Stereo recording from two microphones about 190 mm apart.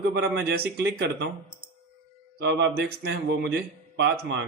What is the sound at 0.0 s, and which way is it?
Speech, 60° right (ahead or behind).